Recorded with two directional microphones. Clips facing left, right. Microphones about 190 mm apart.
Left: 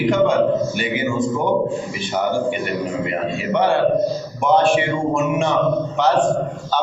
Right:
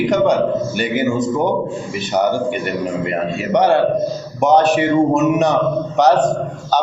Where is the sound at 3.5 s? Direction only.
40° right (ahead or behind).